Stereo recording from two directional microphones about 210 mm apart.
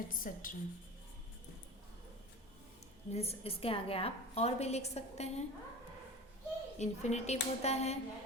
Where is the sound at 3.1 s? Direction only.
30° left (ahead or behind).